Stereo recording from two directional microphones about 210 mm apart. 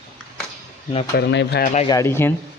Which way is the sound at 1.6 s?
35° left (ahead or behind).